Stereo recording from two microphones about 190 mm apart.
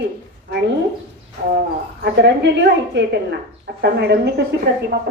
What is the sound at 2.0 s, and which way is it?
A woman's voice, 65° right (ahead or behind).